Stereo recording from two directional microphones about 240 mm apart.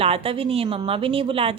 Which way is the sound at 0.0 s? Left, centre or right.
Right.